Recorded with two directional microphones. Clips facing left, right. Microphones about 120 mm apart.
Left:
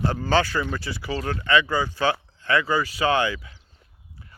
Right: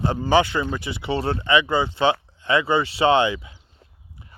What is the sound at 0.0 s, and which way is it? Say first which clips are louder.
A man's voice: right 3 dB; 20° right (ahead or behind).